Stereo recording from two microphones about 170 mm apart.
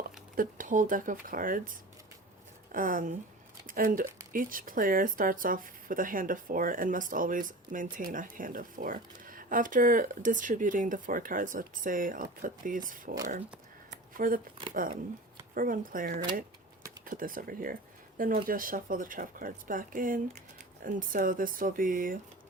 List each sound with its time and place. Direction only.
0.3 s speech: 50° right (ahead or behind)
14.2 s speech: 55° right (ahead or behind)